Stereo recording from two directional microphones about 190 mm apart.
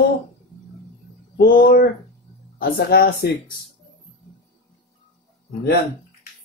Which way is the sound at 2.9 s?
55° left (ahead or behind).